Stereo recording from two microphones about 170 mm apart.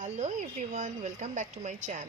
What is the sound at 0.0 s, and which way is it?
Speech, 45° right (ahead or behind).